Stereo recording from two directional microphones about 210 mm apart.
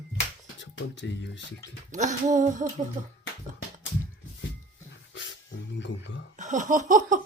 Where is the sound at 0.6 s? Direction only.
60° left (ahead or behind).